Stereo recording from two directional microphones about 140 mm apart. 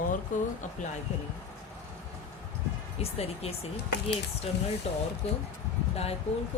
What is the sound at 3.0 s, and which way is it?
Speech, 45° left (ahead or behind).